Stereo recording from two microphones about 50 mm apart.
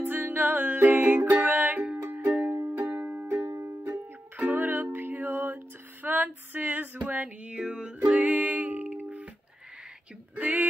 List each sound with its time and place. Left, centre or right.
0.0 s music: right
3.3 s music: right
4.5 s music: right
10.3 s a sound: right